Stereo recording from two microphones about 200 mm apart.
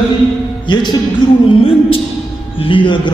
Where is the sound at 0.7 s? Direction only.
25° left (ahead or behind).